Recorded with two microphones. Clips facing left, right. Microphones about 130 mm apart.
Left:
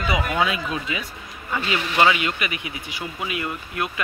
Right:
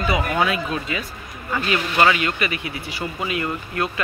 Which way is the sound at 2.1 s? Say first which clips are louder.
Right 3 dB; 15° left (ahead or behind).